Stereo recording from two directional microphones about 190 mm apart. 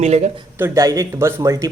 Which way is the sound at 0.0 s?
35° right (ahead or behind).